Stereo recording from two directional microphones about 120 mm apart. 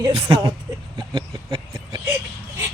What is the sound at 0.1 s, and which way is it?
Speech, 50° right (ahead or behind).